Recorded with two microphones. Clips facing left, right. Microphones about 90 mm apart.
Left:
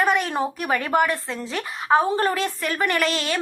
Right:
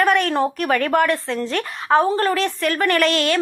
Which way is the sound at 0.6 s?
15° left (ahead or behind).